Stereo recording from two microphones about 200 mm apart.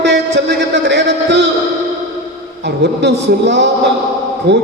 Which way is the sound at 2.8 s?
60° right (ahead or behind).